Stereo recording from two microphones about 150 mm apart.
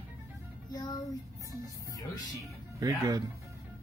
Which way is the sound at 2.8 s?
25° right (ahead or behind).